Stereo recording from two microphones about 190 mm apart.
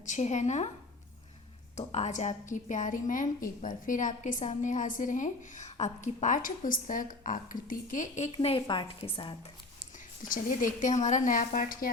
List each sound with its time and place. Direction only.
0.0 s a woman's voice: 40° left (ahead or behind)
1.7 s a woman's voice: 35° left (ahead or behind)
8.3 s a woman's voice: 30° left (ahead or behind)
10.2 s a woman's voice: 45° left (ahead or behind)